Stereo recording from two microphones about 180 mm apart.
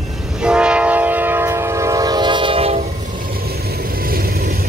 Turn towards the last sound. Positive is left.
turn(degrees=-30)  # may be behind; listen again after turning